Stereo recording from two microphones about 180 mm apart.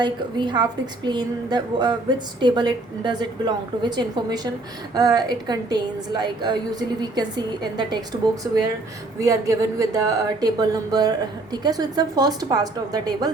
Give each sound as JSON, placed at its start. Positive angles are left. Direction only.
{"t": 0.0, "sound": "a woman's voice", "side_deg": -25}
{"t": 8.4, "sound": "a woman's voice", "side_deg": -10}